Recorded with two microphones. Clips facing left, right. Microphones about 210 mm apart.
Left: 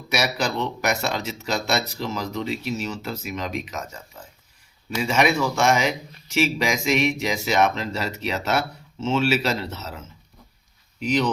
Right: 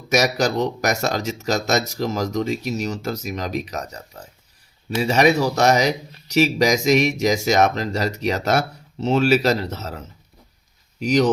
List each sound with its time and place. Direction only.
0.1 s speech: 40° right (ahead or behind)
11.0 s speech: 45° right (ahead or behind)